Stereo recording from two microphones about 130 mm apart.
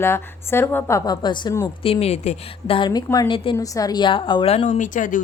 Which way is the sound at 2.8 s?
30° left (ahead or behind).